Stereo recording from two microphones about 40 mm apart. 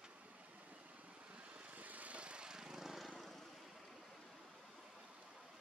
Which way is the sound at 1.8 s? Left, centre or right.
Right.